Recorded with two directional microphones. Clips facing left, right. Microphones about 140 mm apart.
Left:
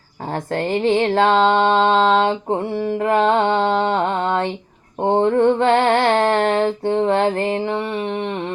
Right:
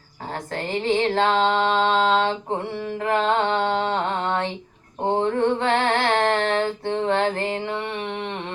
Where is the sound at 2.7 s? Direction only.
45° left (ahead or behind).